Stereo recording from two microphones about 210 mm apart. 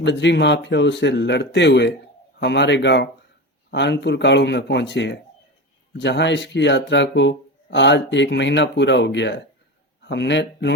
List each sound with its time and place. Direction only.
0.0 s a man's voice: 55° left (ahead or behind)